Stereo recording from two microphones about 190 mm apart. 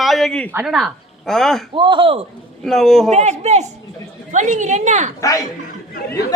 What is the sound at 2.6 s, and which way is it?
Speech, centre (ahead or behind).